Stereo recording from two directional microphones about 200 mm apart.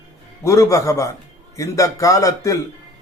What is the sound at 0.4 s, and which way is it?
A man's voice, 15° left (ahead or behind).